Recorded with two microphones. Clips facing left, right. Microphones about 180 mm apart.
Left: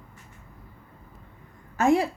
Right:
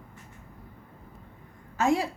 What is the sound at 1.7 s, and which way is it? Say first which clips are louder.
Speech: left 4 dB; 55° left (ahead or behind).